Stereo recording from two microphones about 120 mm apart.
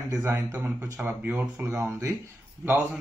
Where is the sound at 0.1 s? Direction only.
20° right (ahead or behind).